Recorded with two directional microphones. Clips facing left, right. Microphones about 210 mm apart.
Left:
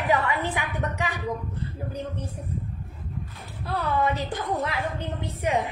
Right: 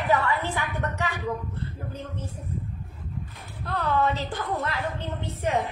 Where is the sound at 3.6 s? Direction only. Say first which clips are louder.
Even; 10° left (ahead or behind).